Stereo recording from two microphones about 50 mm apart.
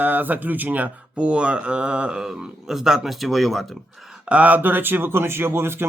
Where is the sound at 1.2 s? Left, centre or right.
Centre.